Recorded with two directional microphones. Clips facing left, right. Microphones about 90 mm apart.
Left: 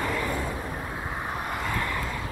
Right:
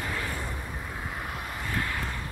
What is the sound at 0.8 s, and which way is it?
Vehicle, 25° left (ahead or behind).